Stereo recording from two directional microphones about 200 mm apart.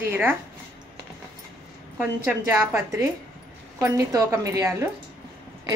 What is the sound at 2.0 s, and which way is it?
Speech, 10° right (ahead or behind).